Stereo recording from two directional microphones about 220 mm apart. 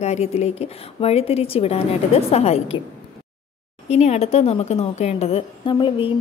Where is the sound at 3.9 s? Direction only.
30° left (ahead or behind).